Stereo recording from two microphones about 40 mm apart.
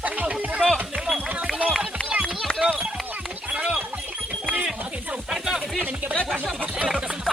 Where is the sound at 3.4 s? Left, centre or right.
Right.